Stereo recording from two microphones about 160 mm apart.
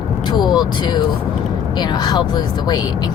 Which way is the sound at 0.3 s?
25° left (ahead or behind).